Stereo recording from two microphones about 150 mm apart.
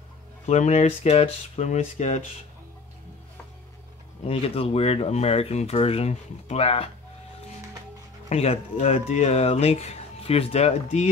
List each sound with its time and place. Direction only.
0.5 s speech: 50° left (ahead or behind)
4.2 s speech: 40° left (ahead or behind)
8.3 s speech: 45° left (ahead or behind)